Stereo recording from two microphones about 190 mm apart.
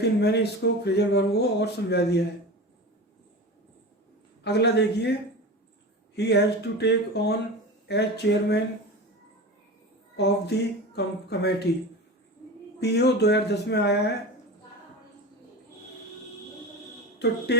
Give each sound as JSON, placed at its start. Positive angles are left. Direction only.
{"t": 0.0, "sound": "speech", "side_deg": 60}
{"t": 4.4, "sound": "speech", "side_deg": 60}
{"t": 6.1, "sound": "speech", "side_deg": 60}
{"t": 10.2, "sound": "speech", "side_deg": 60}
{"t": 12.8, "sound": "speech", "side_deg": 60}
{"t": 17.2, "sound": "speech", "side_deg": 60}